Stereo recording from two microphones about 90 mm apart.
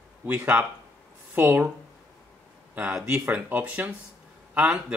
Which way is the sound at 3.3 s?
15° right (ahead or behind).